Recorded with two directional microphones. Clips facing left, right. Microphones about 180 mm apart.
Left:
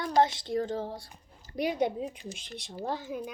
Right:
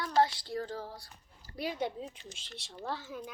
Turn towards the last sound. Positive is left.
turn(degrees=15)  # may be behind; listen again after turning